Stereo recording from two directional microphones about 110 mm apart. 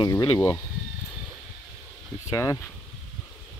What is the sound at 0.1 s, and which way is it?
Speech, 30° left (ahead or behind).